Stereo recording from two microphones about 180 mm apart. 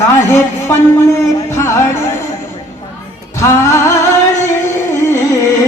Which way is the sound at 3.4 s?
15° left (ahead or behind).